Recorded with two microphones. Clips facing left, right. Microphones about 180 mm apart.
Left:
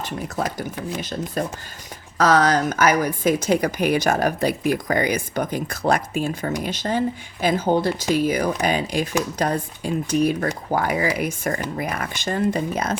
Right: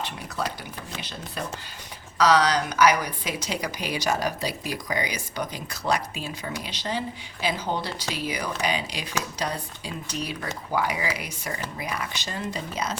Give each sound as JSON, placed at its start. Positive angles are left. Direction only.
{"t": 0.0, "sound": "a woman's voice", "side_deg": 45}